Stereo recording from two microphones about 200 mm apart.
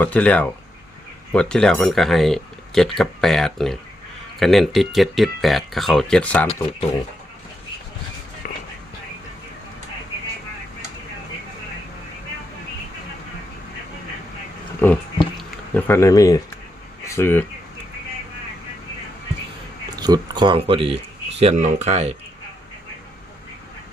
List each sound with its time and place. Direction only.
0.0 s speech: 5° left (ahead or behind)
8.4 s music: 40° left (ahead or behind)
14.8 s speech: 10° left (ahead or behind)
20.0 s speech: 20° right (ahead or behind)